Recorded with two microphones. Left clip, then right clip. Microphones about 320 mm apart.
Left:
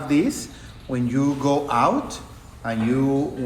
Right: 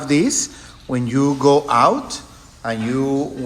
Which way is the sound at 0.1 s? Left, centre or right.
Right.